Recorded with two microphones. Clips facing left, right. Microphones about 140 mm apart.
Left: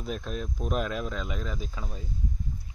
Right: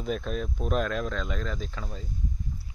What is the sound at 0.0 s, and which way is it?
Speech, centre (ahead or behind).